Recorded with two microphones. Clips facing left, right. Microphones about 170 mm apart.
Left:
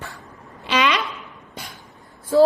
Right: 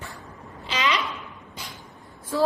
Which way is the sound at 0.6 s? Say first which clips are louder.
Left 6 dB; 70° left (ahead or behind).